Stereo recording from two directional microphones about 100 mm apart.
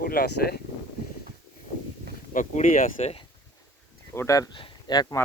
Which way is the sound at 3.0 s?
90° left.